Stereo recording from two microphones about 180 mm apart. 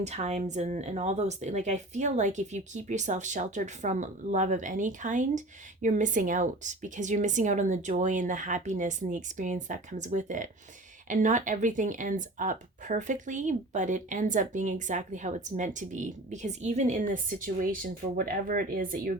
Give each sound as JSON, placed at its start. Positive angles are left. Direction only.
{"t": 0.0, "sound": "speech", "side_deg": -40}